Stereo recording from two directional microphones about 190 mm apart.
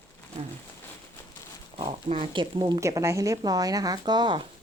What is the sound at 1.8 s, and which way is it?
Speech, 25° right (ahead or behind).